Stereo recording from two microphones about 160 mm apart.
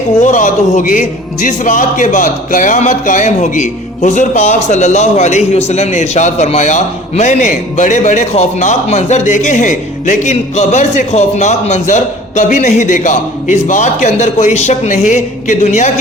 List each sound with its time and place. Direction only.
0.2 s a man's voice: 55° left (ahead or behind)